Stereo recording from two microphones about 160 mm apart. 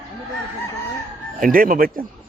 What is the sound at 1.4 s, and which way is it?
Speech, 60° right (ahead or behind).